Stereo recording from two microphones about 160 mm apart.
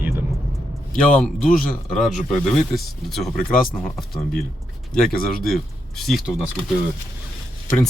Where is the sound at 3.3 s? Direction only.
60° left (ahead or behind).